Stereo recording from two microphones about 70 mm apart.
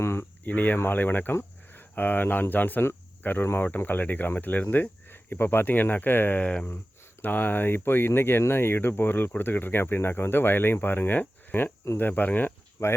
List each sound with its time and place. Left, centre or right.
0.0 s cricket: left
0.4 s speech: left
12.8 s speech: left